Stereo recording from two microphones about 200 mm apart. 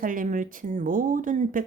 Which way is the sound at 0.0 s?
40° right (ahead or behind).